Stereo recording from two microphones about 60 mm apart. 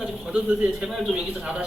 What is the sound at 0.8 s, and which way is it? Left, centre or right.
Speech, centre.